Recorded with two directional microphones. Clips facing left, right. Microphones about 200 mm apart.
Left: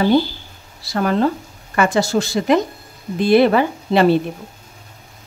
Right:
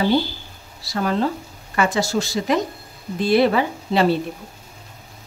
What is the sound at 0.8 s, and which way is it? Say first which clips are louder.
A woman's voice: left 4 dB; 60° left (ahead or behind).